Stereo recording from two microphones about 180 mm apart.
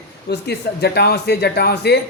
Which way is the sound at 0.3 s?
65° left (ahead or behind).